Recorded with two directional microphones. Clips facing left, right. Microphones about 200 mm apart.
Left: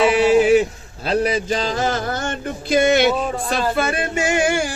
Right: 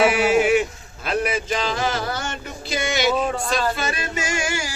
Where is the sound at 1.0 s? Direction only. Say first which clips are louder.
Left 4 dB; 35° left (ahead or behind).